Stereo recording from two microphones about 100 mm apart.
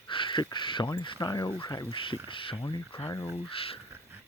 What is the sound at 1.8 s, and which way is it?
Speech, 60° left (ahead or behind).